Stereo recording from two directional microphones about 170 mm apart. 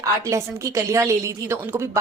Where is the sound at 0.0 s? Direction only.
20° right (ahead or behind).